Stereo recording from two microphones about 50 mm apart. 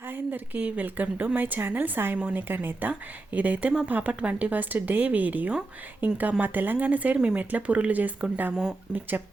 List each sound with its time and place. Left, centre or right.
0.1 s a woman's voice: right
3.3 s a woman's voice: right
8.9 s speech: centre